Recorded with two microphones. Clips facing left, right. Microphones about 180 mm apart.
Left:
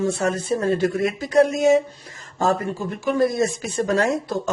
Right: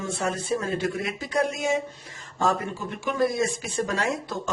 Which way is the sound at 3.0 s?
40° left (ahead or behind).